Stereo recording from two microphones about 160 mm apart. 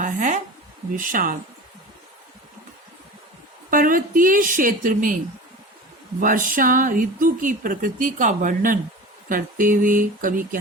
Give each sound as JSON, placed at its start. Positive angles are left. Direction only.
{"t": 0.0, "sound": "a sound", "side_deg": -50}
{"t": 0.9, "sound": "speech", "side_deg": -60}
{"t": 3.7, "sound": "speech", "side_deg": -60}
{"t": 6.1, "sound": "speech", "side_deg": -55}